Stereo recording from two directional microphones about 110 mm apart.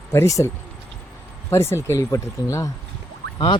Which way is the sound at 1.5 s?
25° left (ahead or behind).